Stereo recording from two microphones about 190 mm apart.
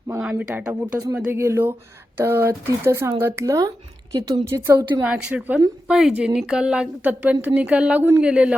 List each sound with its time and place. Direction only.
0.2 s speech: 5° right (ahead or behind)
5.0 s a woman's voice: 5° right (ahead or behind)